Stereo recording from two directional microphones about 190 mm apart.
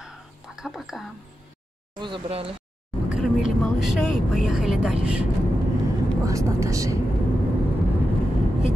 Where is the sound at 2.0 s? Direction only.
30° right (ahead or behind).